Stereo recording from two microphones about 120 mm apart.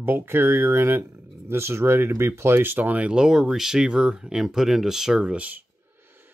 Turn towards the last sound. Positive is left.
turn(degrees=-10)  # may be behind; listen again after turning